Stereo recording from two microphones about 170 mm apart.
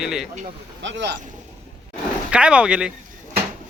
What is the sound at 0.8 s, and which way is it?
Speech, 90° right.